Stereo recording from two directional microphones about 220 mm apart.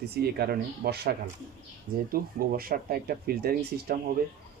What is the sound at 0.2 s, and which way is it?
Speech, 45° right (ahead or behind).